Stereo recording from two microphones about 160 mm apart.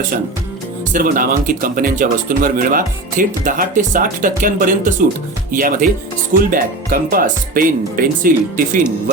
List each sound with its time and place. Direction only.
0.9 s speech: 60° right (ahead or behind)